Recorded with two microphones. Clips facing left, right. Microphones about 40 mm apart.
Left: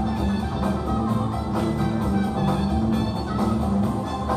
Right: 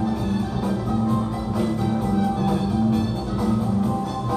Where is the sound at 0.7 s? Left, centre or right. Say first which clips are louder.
Right 3 dB; centre.